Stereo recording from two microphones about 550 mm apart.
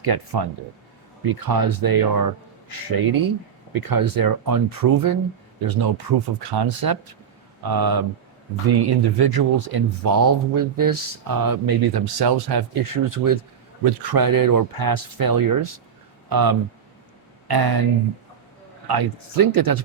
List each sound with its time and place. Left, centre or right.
0.0 s speech: right
18.9 s speech: right